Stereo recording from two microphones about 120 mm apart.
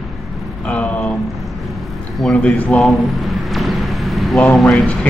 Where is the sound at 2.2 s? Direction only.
10° left (ahead or behind).